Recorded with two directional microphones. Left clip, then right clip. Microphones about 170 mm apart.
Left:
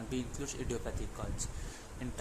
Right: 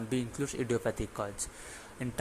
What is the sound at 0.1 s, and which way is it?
Speech, 30° right (ahead or behind).